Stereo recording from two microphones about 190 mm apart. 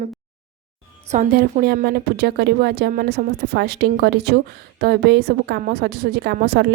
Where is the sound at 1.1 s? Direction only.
45° right (ahead or behind).